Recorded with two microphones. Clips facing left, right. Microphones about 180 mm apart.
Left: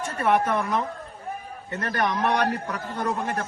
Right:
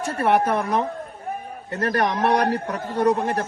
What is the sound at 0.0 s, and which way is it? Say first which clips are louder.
A man's voice: right 3 dB; 35° right (ahead or behind).